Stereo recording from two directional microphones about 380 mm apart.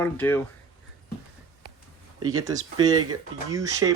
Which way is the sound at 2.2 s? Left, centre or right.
Centre.